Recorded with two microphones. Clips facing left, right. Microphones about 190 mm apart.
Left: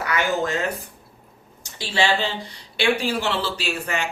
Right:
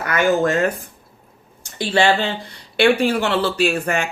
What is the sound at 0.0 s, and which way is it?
Speech, 50° right (ahead or behind).